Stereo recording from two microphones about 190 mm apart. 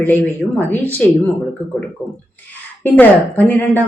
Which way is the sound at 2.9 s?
10° left (ahead or behind).